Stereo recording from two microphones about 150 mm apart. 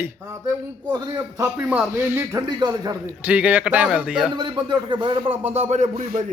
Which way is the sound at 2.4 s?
30° right (ahead or behind).